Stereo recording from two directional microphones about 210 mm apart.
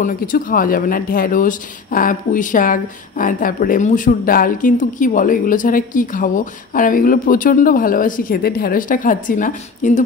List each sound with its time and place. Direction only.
0.0 s speech: 40° left (ahead or behind)